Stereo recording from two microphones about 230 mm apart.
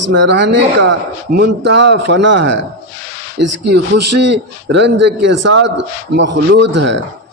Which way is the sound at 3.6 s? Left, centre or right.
Right.